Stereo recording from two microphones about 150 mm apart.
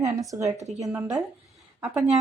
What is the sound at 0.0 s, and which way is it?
Speech, 20° right (ahead or behind).